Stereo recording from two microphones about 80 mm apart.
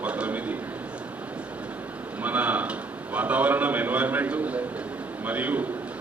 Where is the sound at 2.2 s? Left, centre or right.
Centre.